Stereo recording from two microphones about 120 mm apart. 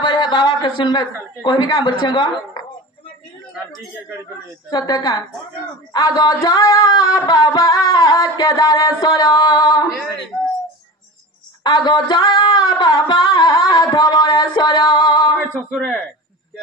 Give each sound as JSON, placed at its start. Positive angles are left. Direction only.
{"t": 0.0, "sound": "a man's voice", "side_deg": 45}
{"t": 4.6, "sound": "singing", "side_deg": 35}
{"t": 11.6, "sound": "singing", "side_deg": 40}